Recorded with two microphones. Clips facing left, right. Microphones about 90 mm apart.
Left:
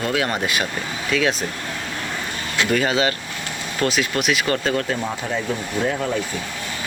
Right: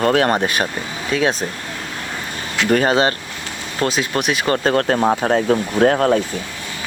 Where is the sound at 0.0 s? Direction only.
45° right (ahead or behind).